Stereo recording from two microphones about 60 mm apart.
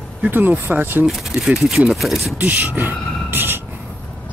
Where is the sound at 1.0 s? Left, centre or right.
Centre.